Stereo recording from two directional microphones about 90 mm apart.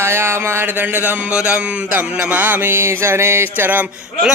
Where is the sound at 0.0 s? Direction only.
25° right (ahead or behind).